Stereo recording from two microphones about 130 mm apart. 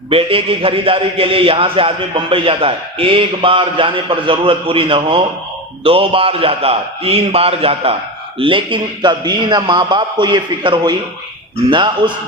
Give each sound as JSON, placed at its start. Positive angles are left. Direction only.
{"t": 0.1, "sound": "a man's voice", "side_deg": -45}